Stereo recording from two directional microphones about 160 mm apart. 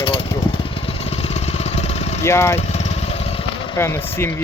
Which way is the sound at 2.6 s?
45° left (ahead or behind).